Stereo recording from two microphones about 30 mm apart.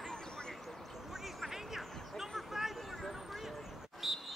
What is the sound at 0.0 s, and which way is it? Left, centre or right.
Vehicle, left.